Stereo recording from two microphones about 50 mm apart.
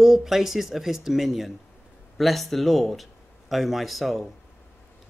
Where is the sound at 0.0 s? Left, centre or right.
Centre.